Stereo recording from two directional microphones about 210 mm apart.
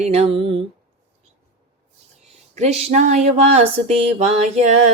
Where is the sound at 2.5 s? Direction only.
30° right (ahead or behind).